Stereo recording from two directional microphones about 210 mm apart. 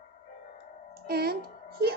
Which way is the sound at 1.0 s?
50° right (ahead or behind).